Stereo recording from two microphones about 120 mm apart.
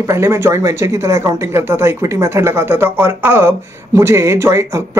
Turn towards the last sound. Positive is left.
turn(degrees=-25)  # may be behind; listen again after turning